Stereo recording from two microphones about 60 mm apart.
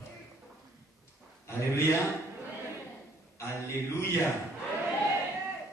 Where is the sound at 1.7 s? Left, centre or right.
Left.